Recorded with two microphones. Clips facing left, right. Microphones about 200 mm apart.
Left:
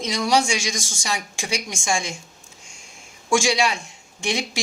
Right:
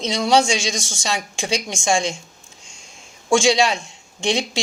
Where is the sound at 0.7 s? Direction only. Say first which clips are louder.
Right 3 dB; 70° right (ahead or behind).